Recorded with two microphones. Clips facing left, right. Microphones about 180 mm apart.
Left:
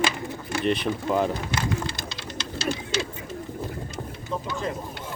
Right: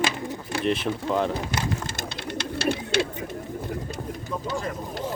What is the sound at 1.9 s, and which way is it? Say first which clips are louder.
Bird: right 4 dB; 60° right (ahead or behind).